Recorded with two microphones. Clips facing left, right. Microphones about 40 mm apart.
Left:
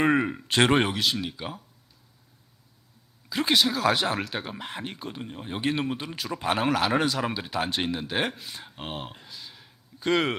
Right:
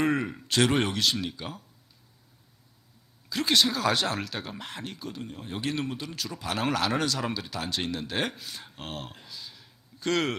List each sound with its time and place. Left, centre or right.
0.0 s speech: left
0.8 s speech: centre
3.2 s speech: centre
6.3 s speech: left
6.7 s speech: centre